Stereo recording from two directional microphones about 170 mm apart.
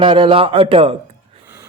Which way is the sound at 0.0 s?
30° right (ahead or behind).